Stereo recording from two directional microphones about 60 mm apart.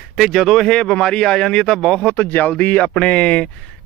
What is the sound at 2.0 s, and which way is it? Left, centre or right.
Speech, left.